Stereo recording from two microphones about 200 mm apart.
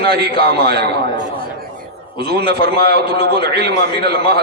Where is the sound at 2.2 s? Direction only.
55° right (ahead or behind).